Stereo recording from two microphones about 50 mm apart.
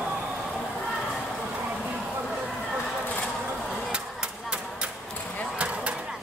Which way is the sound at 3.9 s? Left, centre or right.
Right.